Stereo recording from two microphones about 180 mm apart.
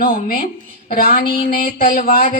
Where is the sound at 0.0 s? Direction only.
55° left (ahead or behind).